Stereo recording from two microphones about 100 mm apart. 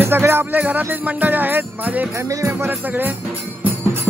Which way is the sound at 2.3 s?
30° right (ahead or behind).